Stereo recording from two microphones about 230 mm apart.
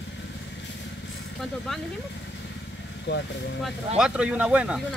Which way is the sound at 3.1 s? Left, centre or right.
Left.